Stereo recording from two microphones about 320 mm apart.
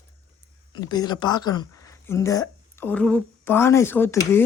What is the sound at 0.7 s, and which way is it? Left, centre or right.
Speech, centre.